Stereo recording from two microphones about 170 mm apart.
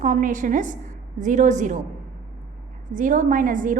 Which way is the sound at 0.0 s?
50° right (ahead or behind).